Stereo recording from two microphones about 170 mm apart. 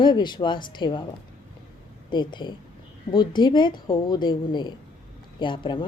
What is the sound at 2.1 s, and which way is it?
A woman's voice, 25° left (ahead or behind).